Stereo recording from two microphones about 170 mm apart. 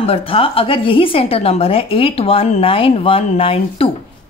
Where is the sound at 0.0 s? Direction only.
35° left (ahead or behind).